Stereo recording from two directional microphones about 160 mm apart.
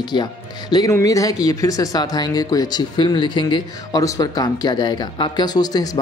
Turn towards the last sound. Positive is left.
turn(degrees=25)  # may be behind; listen again after turning